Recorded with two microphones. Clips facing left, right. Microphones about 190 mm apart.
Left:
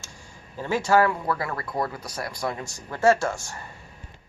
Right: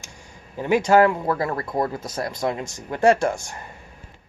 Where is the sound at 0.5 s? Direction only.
15° right (ahead or behind).